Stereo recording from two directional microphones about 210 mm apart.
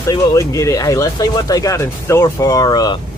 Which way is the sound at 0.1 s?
15° left (ahead or behind).